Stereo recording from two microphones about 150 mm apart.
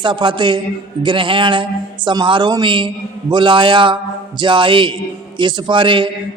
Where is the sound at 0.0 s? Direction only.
30° right (ahead or behind).